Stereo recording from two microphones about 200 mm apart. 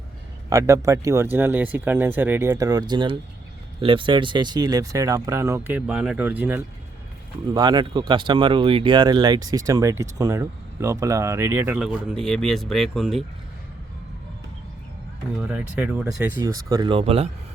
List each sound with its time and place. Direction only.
0.5 s speech: 15° right (ahead or behind)
7.5 s speech: 20° right (ahead or behind); by 13.2 s centre (ahead or behind)
15.4 s speech: 5° right (ahead or behind)
16.6 s speech: 20° right (ahead or behind)